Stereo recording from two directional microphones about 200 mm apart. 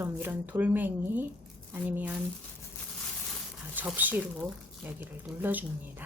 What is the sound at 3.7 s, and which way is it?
Speech, 10° right (ahead or behind).